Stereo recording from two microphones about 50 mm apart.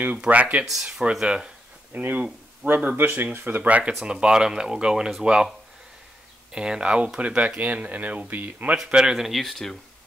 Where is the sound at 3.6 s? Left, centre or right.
Right.